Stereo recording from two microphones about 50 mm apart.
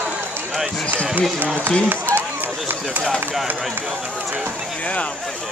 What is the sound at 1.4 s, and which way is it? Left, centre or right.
Speech, right.